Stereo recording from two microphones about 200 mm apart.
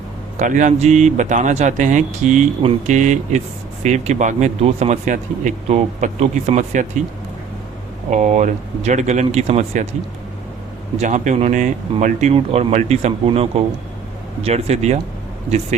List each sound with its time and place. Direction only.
0.3 s speech: 40° right (ahead or behind)
8.1 s speech: 35° right (ahead or behind)
10.9 s speech: 40° right (ahead or behind)